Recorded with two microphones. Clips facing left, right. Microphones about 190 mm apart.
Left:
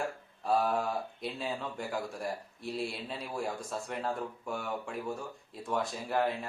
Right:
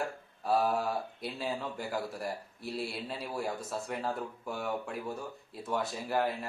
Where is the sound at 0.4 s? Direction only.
Centre (ahead or behind).